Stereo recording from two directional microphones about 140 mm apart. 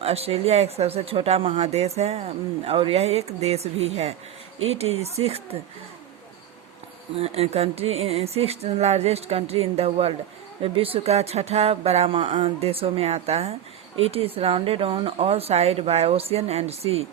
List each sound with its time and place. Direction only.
0.0 s speech: 45° right (ahead or behind)
7.2 s speech: 45° right (ahead or behind)